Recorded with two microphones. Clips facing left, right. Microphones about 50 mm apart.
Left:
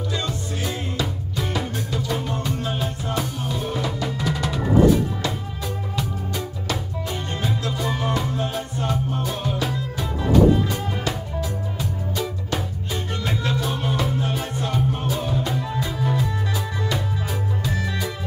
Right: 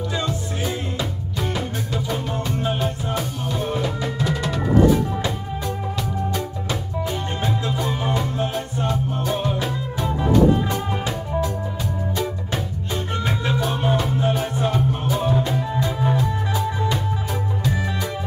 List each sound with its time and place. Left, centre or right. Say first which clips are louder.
0.1 s music: right 2 dB; centre
3.5 s music: right 3 dB; centre
4.3 s music: even; centre
7.4 s music: right 1 dB; centre
9.3 s music: right 2 dB; centre
13.2 s music: right 1 dB; centre
16.0 s music: right 2 dB; centre